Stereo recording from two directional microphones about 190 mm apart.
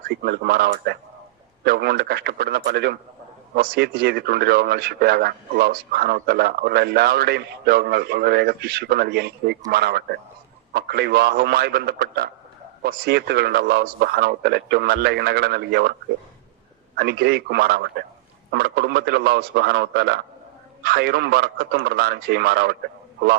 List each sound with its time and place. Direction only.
0.0 s a man's voice: 60° right (ahead or behind)
17.0 s a man's voice: 55° right (ahead or behind)